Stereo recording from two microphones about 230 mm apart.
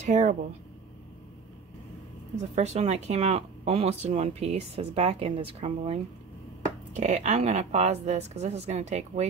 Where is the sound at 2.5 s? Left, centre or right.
Right.